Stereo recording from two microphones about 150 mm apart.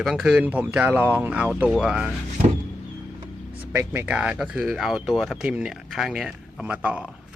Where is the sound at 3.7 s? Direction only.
10° right (ahead or behind).